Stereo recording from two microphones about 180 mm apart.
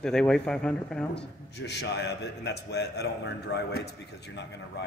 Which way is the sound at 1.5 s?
70° left (ahead or behind).